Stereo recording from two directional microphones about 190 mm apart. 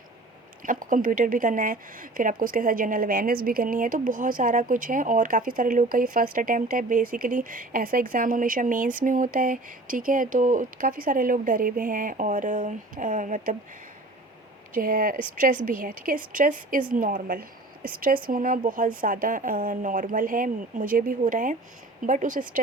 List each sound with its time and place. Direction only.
0.6 s speech: 45° right (ahead or behind)
14.8 s speech: 45° right (ahead or behind)